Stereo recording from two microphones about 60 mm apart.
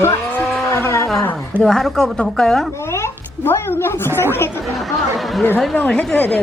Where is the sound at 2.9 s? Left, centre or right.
Left.